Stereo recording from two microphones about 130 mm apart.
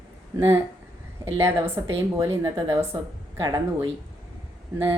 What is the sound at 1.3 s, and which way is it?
Speech, 20° right (ahead or behind).